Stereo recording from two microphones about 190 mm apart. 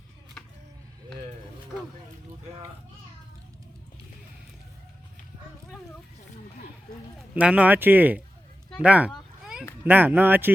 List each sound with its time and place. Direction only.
7.3 s speech: 5° right (ahead or behind)
8.8 s a sound: 5° right (ahead or behind)
9.8 s speech: 10° right (ahead or behind)